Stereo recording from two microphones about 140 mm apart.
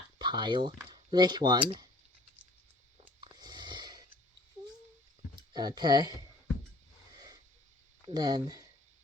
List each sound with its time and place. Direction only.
0.2 s speech: 30° right (ahead or behind)
3.3 s a sound: 30° right (ahead or behind)
5.5 s speech: 30° right (ahead or behind)
8.0 s speech: 30° right (ahead or behind)